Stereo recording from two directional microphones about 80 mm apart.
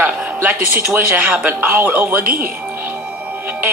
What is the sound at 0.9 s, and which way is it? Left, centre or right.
Speech, centre.